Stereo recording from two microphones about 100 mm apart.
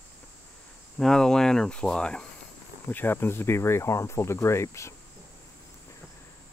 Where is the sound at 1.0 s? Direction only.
5° left (ahead or behind).